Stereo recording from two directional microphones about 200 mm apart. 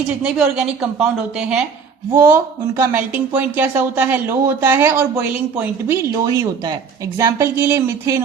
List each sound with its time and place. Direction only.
0.2 s a woman's voice: 5° right (ahead or behind)
6.2 s speech: 20° right (ahead or behind)